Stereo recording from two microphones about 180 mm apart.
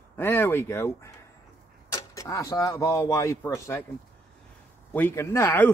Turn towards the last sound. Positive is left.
turn(degrees=10)  # may be behind; listen again after turning